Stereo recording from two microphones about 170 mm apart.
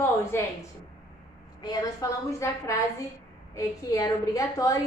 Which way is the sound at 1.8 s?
20° left (ahead or behind).